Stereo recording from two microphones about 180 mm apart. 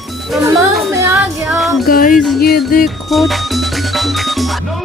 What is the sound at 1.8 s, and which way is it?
Music, 50° left (ahead or behind).